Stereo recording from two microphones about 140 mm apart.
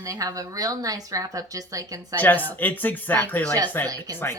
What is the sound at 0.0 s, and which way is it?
A woman's voice, 25° right (ahead or behind).